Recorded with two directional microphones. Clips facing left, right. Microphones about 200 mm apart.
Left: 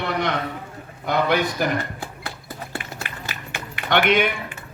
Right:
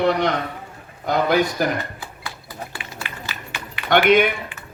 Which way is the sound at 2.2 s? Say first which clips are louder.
Even; 55° left (ahead or behind).